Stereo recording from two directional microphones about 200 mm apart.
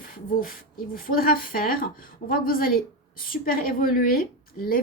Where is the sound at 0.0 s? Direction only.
45° left (ahead or behind).